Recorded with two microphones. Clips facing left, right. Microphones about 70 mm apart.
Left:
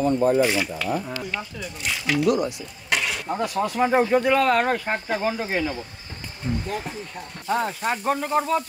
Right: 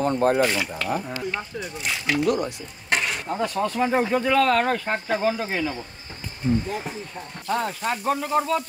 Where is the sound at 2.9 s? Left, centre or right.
Right.